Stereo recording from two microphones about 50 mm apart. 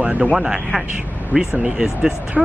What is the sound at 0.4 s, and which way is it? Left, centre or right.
Speech, centre.